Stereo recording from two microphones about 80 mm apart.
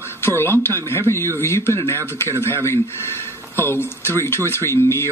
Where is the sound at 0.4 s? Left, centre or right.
Left.